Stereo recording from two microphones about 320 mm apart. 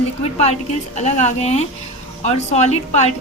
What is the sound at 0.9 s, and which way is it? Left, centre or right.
A woman's voice, left.